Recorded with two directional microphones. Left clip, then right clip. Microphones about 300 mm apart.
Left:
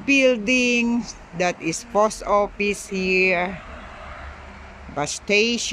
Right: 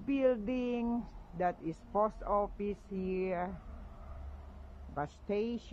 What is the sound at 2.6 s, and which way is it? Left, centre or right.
Speech, centre.